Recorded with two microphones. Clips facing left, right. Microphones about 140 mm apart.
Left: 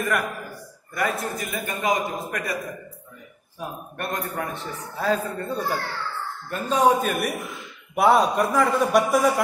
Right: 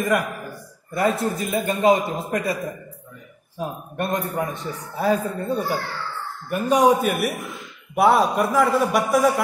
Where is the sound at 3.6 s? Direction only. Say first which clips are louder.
Right 5 dB; 25° right (ahead or behind).